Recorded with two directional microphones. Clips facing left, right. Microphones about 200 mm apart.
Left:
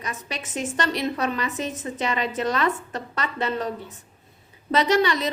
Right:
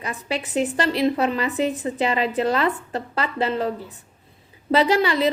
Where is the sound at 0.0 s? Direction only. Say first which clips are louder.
Right 6 dB; 30° right (ahead or behind).